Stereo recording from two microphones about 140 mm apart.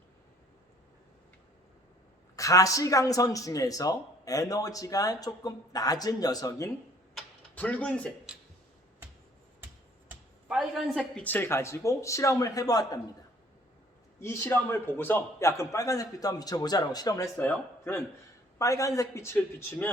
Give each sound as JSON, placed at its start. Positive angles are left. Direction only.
{"t": 2.3, "sound": "speech", "side_deg": 25}
{"t": 7.1, "sound": "a sound", "side_deg": 10}
{"t": 10.1, "sound": "a sound", "side_deg": -5}
{"t": 11.2, "sound": "speech", "side_deg": 15}
{"t": 14.2, "sound": "speech", "side_deg": 15}
{"t": 17.3, "sound": "speech", "side_deg": 15}